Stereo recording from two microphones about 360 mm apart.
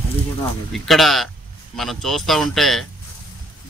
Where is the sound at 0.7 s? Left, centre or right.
Centre.